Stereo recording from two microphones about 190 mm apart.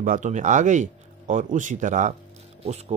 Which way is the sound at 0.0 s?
40° right (ahead or behind).